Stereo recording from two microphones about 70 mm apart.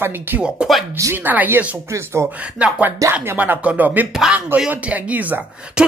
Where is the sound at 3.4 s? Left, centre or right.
Right.